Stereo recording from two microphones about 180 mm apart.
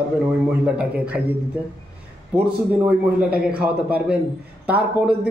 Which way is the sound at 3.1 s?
5° right (ahead or behind).